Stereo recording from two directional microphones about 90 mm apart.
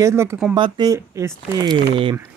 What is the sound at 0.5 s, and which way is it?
Speech, 60° right (ahead or behind).